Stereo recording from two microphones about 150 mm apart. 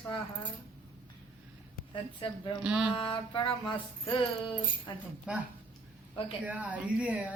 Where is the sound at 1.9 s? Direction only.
35° left (ahead or behind).